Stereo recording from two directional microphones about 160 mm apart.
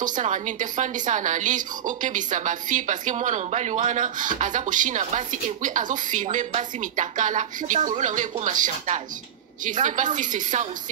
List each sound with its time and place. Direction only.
0.0 s a woman's voice: 50° right (ahead or behind)